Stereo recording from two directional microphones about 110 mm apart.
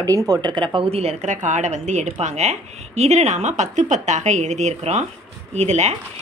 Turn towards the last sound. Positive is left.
turn(degrees=-90)